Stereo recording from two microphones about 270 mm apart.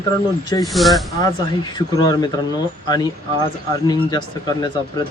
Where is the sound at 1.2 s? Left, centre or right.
Centre.